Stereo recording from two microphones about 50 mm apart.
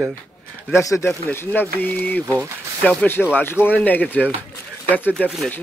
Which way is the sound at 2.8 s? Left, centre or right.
Left.